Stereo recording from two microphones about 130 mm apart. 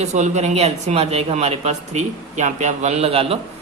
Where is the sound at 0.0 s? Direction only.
65° right (ahead or behind).